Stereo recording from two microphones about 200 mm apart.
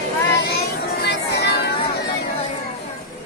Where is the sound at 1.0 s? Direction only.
55° left (ahead or behind).